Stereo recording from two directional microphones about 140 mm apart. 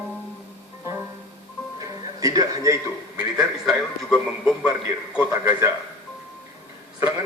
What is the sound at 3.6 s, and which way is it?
Speech, centre (ahead or behind).